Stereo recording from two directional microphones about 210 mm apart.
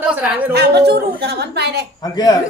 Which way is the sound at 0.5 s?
50° right (ahead or behind).